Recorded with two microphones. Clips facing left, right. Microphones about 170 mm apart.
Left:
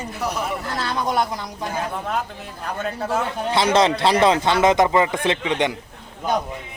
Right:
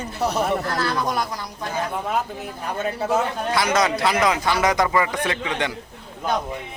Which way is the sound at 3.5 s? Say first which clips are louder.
Left 5 dB; 25° left (ahead or behind).